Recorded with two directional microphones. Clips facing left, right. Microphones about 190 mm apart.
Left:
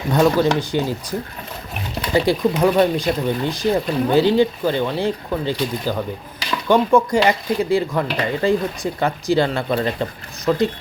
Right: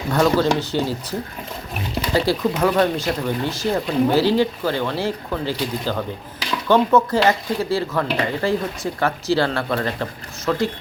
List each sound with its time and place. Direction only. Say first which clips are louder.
0.1 s speech: left 2 dB; 15° left (ahead or behind)
2.1 s speech: left 3 dB; 15° left (ahead or behind)